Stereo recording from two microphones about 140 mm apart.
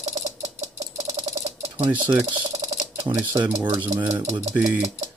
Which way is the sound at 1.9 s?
10° right (ahead or behind).